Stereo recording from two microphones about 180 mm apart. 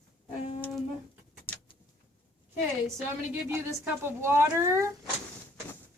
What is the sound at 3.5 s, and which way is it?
A woman's voice, 15° right (ahead or behind).